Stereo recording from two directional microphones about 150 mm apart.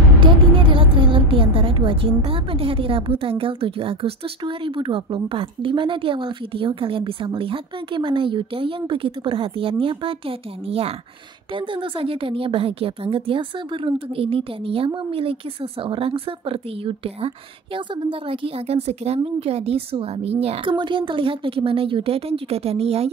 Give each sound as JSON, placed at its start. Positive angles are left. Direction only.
{"t": 0.2, "sound": "a woman's voice", "side_deg": -35}
{"t": 18.3, "sound": "a woman's voice", "side_deg": -40}